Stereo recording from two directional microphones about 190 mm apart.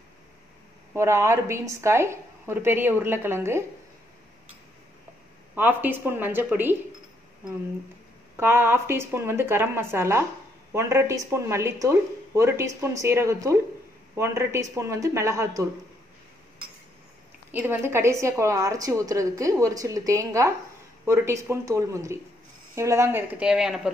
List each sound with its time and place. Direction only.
0.9 s a woman's voice: 15° right (ahead or behind)
5.5 s a woman's voice: 10° right (ahead or behind)
8.4 s a woman's voice: 10° right (ahead or behind)
17.5 s a woman's voice: 10° right (ahead or behind)